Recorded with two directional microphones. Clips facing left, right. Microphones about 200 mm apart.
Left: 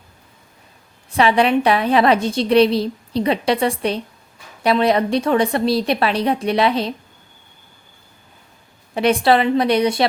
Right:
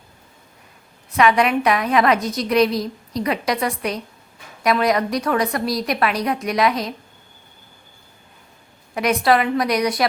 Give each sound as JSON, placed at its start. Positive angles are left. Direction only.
{"t": 1.1, "sound": "a woman's voice", "side_deg": 30}
{"t": 9.0, "sound": "a woman's voice", "side_deg": 30}